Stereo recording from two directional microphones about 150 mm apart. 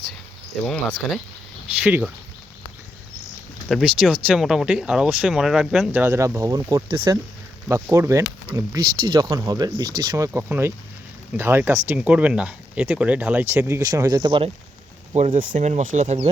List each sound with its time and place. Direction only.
0.6 s speech: 5° left (ahead or behind)
1.8 s speech: 10° right (ahead or behind)
3.7 s speech: centre (ahead or behind)
5.9 s speech: 15° right (ahead or behind)
6.8 s speech: 35° right (ahead or behind)
7.7 s speech: 20° right (ahead or behind); by 14.5 s 35° right (ahead or behind)
15.4 s speech: 55° right (ahead or behind)